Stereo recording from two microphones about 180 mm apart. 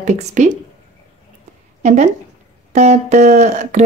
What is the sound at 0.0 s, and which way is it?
Speech, 40° right (ahead or behind).